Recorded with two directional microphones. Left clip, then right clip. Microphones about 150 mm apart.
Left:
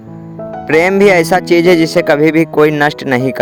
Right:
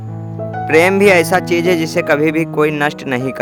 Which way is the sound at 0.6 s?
25° left (ahead or behind).